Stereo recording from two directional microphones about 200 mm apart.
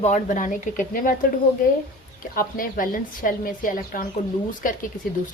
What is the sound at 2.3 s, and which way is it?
A woman's voice, 45° left (ahead or behind).